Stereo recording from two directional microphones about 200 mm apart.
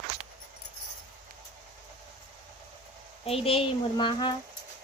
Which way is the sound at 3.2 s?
30° left (ahead or behind).